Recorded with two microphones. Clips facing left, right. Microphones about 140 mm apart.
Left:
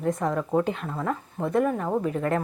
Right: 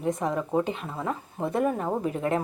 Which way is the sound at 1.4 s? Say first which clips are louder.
Left 2 dB; 25° right (ahead or behind).